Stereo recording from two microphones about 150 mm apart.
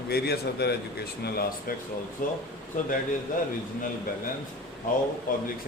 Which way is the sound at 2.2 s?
65° left (ahead or behind).